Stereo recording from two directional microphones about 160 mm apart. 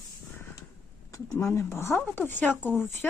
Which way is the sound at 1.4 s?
15° left (ahead or behind).